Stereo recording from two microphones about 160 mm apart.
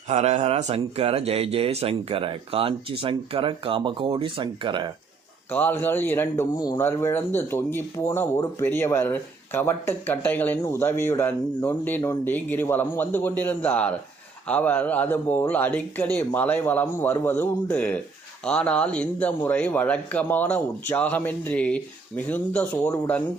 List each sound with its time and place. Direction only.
0.1 s speech: 45° right (ahead or behind)
5.5 s a man's voice: 10° left (ahead or behind)